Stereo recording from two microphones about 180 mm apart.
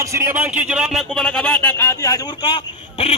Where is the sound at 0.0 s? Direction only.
15° right (ahead or behind).